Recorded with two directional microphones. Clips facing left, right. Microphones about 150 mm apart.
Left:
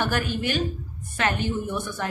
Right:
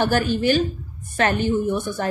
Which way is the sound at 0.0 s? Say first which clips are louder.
Right 6 dB; 30° right (ahead or behind).